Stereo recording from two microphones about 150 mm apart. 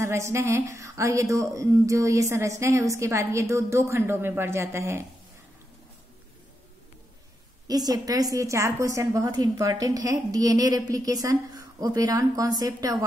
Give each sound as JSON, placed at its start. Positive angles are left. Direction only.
{"t": 0.0, "sound": "a woman's voice", "side_deg": -20}
{"t": 7.6, "sound": "a woman's voice", "side_deg": -25}